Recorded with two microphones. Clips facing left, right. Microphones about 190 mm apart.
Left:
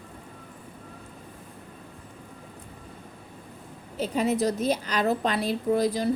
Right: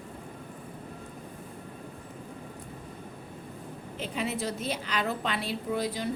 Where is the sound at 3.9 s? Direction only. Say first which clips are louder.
Left 8 dB; 40° left (ahead or behind).